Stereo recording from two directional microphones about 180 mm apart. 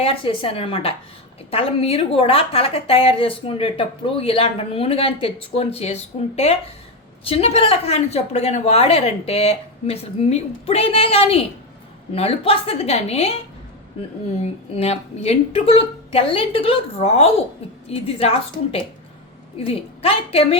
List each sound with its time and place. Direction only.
0.0 s a woman's voice: 30° left (ahead or behind)
14.3 s a woman's voice: 35° left (ahead or behind)